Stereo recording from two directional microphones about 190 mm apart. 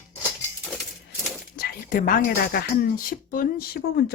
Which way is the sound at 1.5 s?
45° left (ahead or behind).